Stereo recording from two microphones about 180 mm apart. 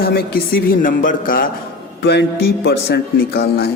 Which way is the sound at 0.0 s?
60° left (ahead or behind).